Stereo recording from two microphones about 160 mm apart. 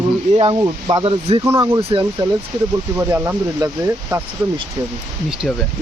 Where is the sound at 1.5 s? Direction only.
20° right (ahead or behind).